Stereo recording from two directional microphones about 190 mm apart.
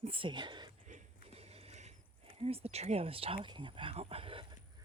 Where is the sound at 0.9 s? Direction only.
35° right (ahead or behind).